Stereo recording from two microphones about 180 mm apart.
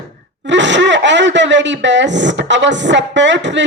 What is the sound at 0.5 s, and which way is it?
Speech, 85° right.